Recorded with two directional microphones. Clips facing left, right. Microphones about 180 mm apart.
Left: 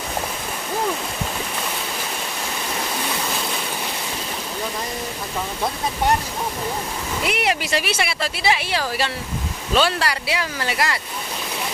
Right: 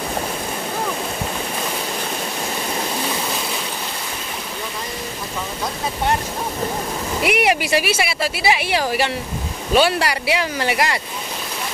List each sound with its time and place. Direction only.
7.2 s speech: 15° right (ahead or behind)